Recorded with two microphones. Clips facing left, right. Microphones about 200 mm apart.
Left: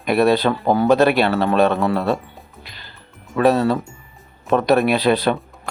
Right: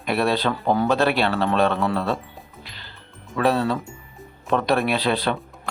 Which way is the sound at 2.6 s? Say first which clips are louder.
Left 1 dB; 15° left (ahead or behind).